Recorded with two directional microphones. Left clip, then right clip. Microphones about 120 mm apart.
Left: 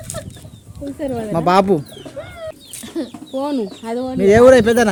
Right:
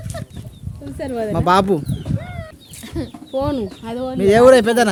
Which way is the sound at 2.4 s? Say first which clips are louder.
Left 6 dB; 20° left (ahead or behind).